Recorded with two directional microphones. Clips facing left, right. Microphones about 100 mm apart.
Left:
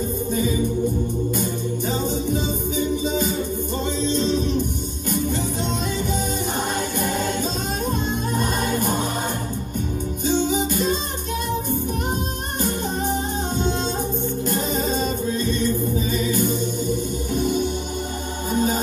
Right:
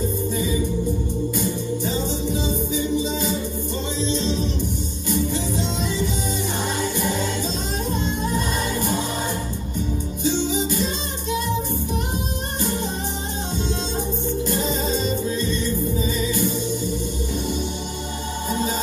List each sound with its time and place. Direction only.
1.3 s music: 50° left (ahead or behind)
10.2 s music: 50° left (ahead or behind)
13.7 s music: 50° left (ahead or behind)